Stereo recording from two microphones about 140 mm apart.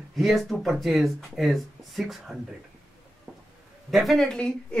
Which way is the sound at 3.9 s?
Centre (ahead or behind).